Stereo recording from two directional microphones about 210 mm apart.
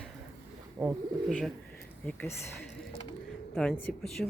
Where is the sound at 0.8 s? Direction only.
15° right (ahead or behind).